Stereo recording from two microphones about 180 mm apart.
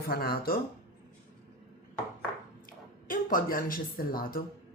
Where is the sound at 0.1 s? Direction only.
55° left (ahead or behind).